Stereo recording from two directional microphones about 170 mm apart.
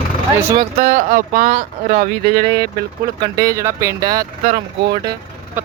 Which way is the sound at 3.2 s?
20° right (ahead or behind).